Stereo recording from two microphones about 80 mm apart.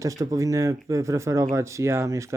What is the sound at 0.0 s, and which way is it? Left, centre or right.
Speech, right.